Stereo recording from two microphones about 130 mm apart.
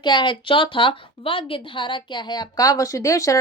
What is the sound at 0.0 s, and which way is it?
A woman's voice, 35° left (ahead or behind).